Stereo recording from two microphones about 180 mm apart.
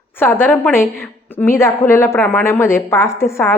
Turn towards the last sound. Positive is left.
turn(degrees=15)  # may be behind; listen again after turning